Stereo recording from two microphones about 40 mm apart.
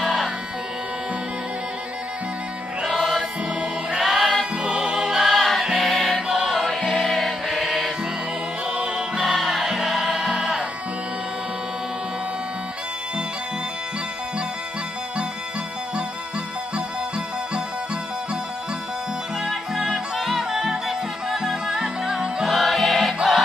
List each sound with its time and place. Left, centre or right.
3.0 s music: centre
4.6 s music: right
5.2 s music: centre
6.2 s music: centre
7.0 s music: centre
8.7 s music: right
9.2 s music: centre
20.2 s music: centre
22.4 s music: centre